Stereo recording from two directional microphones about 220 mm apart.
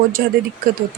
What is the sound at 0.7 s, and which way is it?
Speech, 40° right (ahead or behind).